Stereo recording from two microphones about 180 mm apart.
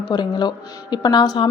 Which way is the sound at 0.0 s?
25° left (ahead or behind).